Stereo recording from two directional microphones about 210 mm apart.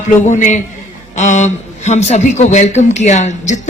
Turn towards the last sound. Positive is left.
turn(degrees=35)  # may be behind; listen again after turning